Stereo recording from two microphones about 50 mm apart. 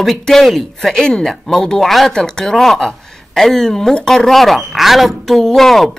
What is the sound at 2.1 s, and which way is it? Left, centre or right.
A woman's voice, centre.